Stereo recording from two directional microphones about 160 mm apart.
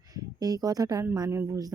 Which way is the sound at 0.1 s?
25° right (ahead or behind).